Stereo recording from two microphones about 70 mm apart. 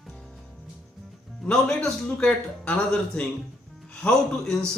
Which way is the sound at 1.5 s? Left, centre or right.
Centre.